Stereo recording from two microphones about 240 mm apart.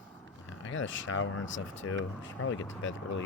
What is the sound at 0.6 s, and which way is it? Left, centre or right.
Speech, left.